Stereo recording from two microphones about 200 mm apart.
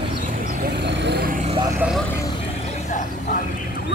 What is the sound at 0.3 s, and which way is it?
Vehicle, 40° right (ahead or behind).